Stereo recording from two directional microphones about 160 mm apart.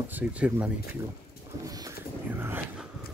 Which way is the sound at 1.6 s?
20° right (ahead or behind).